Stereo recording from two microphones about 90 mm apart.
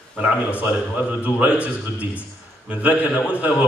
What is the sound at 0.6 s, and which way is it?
A man's voice, 15° right (ahead or behind).